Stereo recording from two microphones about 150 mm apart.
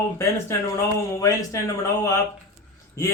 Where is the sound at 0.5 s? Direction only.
15° left (ahead or behind).